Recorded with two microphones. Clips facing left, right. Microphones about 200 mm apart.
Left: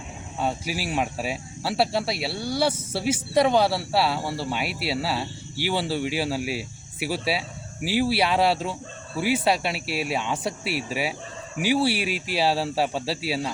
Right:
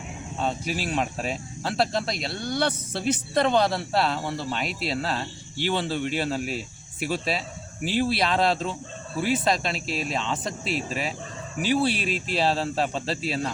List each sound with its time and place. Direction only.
0.3 s speech: 10° left (ahead or behind)